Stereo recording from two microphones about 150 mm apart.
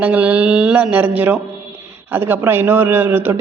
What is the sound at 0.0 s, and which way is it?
Speech, 10° right (ahead or behind).